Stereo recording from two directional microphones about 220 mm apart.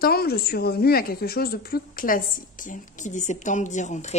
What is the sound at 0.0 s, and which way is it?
A woman's voice, 45° left (ahead or behind).